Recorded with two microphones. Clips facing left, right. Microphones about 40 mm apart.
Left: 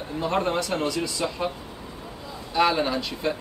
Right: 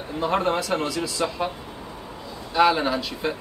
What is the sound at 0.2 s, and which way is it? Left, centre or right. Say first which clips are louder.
Speech: right 2 dB; centre.